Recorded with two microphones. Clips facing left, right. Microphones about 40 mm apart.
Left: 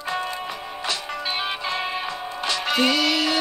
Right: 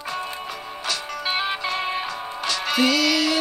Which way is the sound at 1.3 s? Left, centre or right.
Centre.